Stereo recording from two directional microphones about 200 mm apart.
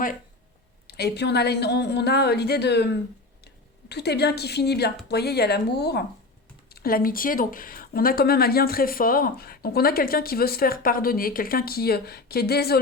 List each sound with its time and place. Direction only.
0.9 s a woman's voice: 55° left (ahead or behind)